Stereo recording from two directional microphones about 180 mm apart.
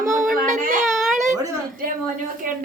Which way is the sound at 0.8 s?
Centre (ahead or behind).